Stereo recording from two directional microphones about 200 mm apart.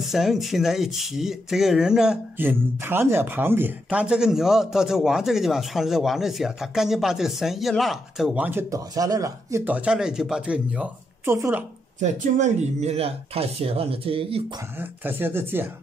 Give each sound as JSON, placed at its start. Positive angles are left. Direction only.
{"t": 0.0, "sound": "speech", "side_deg": 0}
{"t": 12.0, "sound": "speech", "side_deg": -35}
{"t": 14.8, "sound": "speech", "side_deg": -10}